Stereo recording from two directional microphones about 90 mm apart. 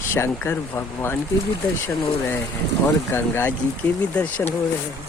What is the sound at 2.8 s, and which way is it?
Speech, 25° left (ahead or behind).